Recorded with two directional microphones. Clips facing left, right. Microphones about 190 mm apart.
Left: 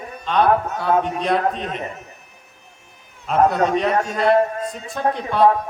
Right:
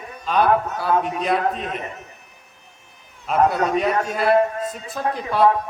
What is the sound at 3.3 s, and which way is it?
Speech, 5° right (ahead or behind).